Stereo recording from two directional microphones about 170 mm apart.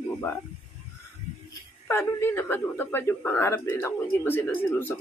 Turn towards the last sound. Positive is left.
turn(degrees=10)  # may be behind; listen again after turning